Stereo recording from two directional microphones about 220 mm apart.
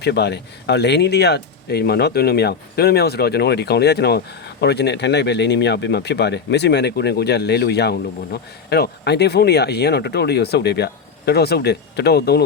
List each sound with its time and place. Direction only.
0.0 s speech: 50° left (ahead or behind)